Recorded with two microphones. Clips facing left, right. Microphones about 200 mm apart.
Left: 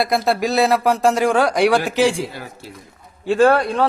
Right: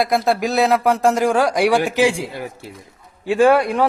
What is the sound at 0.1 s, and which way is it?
A man's voice, 5° left (ahead or behind).